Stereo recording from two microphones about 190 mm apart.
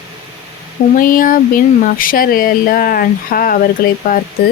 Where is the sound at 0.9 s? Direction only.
45° left (ahead or behind).